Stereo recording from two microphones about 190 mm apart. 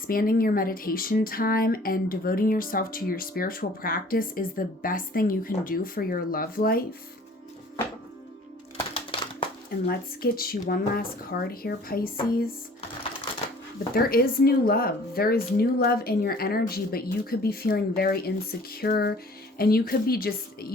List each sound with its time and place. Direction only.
0.1 s speech: 50° left (ahead or behind)
8.9 s crumpling: 30° left (ahead or behind)
9.8 s speech: 55° left (ahead or behind)
13.9 s speech: 50° left (ahead or behind)